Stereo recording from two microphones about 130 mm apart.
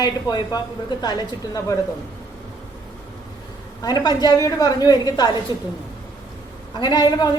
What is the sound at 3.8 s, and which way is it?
A man's voice, 30° left (ahead or behind).